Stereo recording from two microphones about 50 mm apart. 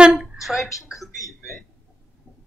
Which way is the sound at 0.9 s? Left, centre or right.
Centre.